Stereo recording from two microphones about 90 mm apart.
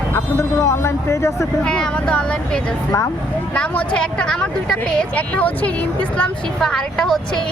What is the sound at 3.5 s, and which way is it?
Speech, 15° left (ahead or behind).